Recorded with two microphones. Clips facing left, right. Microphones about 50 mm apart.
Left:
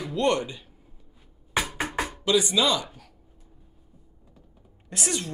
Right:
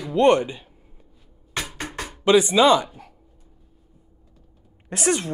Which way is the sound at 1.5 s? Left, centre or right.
Centre.